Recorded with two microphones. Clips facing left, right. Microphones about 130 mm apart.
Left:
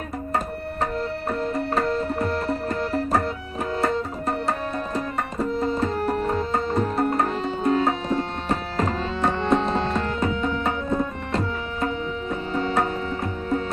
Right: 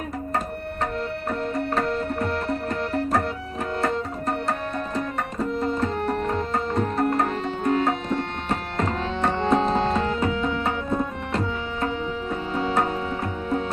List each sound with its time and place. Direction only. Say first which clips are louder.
1.4 s music: left 1 dB; 5° left (ahead or behind)
5.5 s tabla: left 1 dB; 5° left (ahead or behind)
7.3 s music: left 1 dB; 15° left (ahead or behind)
9.6 s tabla: right 2 dB; centre (ahead or behind)
12.3 s music: left 1 dB; centre (ahead or behind)